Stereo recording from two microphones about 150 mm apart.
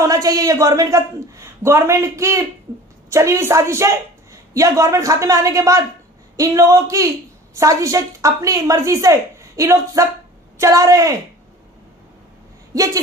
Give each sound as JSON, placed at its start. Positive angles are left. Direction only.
{"t": 0.0, "sound": "a woman's voice", "side_deg": -20}
{"t": 12.7, "sound": "a woman's voice", "side_deg": -25}